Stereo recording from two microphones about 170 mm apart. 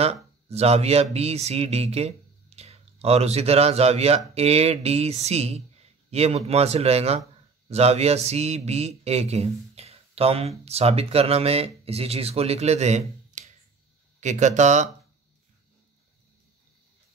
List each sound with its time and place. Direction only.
0.0 s speech: 35° right (ahead or behind)